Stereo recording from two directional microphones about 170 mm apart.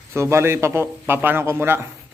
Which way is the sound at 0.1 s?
15° right (ahead or behind).